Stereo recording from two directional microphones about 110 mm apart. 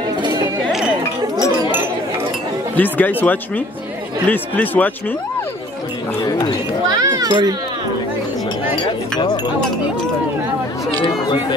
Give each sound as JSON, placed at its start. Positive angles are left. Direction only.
{"t": 0.2, "sound": "chink", "side_deg": -45}
{"t": 1.3, "sound": "chink", "side_deg": 35}
{"t": 2.7, "sound": "speech", "side_deg": 15}
{"t": 6.2, "sound": "speech", "side_deg": 35}
{"t": 7.0, "sound": "children playing", "side_deg": -35}